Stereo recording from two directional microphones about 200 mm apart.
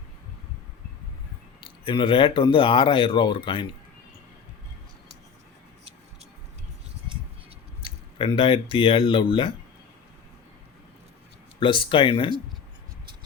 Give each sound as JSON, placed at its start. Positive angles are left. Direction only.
{"t": 1.6, "sound": "speech", "side_deg": 25}
{"t": 7.9, "sound": "speech", "side_deg": 25}
{"t": 11.6, "sound": "speech", "side_deg": 25}